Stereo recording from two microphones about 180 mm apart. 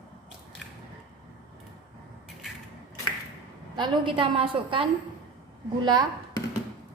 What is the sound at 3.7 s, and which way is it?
A woman's voice, 25° right (ahead or behind).